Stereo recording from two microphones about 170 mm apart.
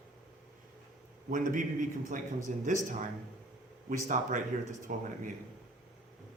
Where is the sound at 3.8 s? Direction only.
50° right (ahead or behind).